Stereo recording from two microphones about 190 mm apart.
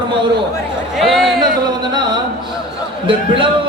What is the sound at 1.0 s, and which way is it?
Speech, centre (ahead or behind).